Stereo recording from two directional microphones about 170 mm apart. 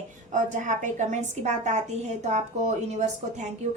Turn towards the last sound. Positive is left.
turn(degrees=-40)  # may be behind; listen again after turning